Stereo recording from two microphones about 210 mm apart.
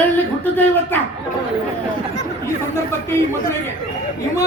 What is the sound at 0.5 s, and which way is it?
Speech, 10° left (ahead or behind).